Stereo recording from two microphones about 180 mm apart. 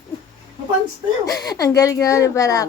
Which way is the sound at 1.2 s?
20° left (ahead or behind).